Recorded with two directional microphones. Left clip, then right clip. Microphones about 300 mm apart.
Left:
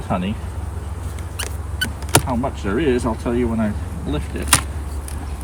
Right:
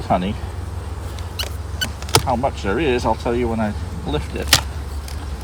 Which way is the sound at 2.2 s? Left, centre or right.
Centre.